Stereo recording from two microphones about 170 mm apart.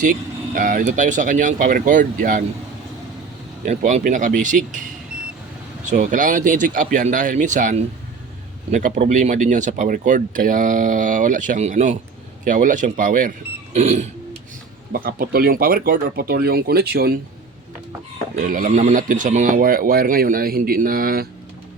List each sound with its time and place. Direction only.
0.0 s speech: 55° right (ahead or behind)
3.7 s speech: 45° right (ahead or behind)
5.9 s speech: 50° right (ahead or behind)
13.7 s a sound: 40° right (ahead or behind)
14.9 s speech: 60° right (ahead or behind)
18.3 s speech: 55° right (ahead or behind)